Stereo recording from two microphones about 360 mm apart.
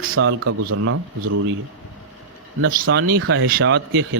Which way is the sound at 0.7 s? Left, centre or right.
Right.